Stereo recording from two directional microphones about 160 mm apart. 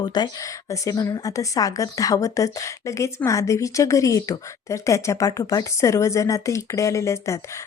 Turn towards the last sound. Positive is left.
turn(degrees=20)  # may be behind; listen again after turning